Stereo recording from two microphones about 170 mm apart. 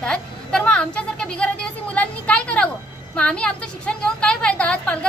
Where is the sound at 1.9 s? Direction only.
10° left (ahead or behind).